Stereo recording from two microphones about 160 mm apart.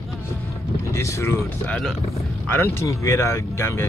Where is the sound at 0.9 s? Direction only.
15° left (ahead or behind).